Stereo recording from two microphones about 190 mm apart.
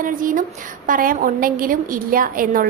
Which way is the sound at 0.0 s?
45° right (ahead or behind).